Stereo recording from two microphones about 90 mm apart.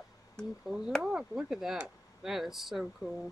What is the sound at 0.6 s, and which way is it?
Speech, 10° right (ahead or behind).